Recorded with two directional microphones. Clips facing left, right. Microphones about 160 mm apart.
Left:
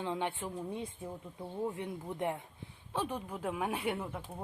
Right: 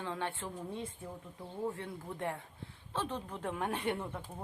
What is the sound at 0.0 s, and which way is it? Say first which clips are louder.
Speech: left 3 dB; 15° left (ahead or behind).